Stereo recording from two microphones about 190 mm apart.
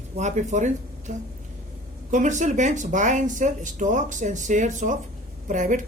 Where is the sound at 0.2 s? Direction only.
40° right (ahead or behind).